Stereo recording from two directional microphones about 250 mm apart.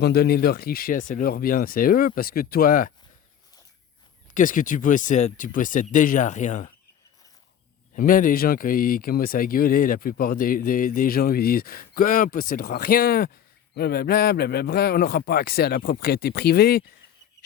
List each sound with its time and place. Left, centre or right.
0.0 s speech: left
4.4 s speech: left
7.9 s speech: left